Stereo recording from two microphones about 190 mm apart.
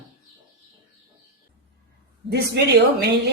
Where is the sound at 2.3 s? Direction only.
60° right (ahead or behind).